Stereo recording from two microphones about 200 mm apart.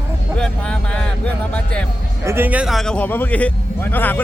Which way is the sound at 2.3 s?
10° right (ahead or behind).